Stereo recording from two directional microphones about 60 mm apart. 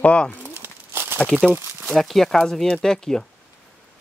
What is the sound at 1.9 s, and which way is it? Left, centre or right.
Speech, centre.